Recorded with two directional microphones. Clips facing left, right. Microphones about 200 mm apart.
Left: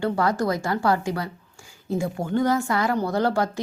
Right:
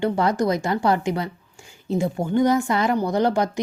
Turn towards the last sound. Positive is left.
turn(degrees=-20)  # may be behind; listen again after turning